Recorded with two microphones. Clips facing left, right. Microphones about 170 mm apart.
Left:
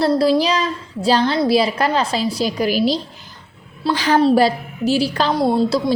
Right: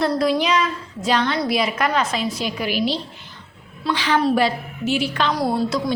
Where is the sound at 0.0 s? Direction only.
30° left (ahead or behind).